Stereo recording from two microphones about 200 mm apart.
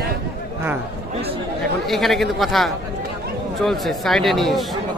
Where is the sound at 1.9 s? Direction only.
Centre (ahead or behind).